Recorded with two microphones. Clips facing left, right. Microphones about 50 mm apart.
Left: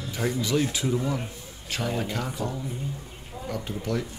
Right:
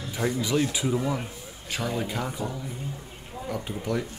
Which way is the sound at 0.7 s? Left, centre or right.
Centre.